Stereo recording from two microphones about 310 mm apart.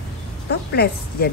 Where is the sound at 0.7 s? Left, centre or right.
Left.